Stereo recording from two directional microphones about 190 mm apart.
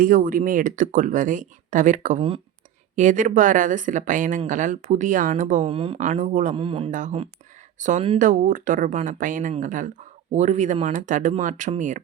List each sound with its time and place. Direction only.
0.0 s speech: 45° right (ahead or behind)
5.7 s speech: 30° right (ahead or behind)
6.0 s speech: 40° right (ahead or behind)
6.6 s speech: 30° right (ahead or behind)
8.2 s speech: 45° right (ahead or behind)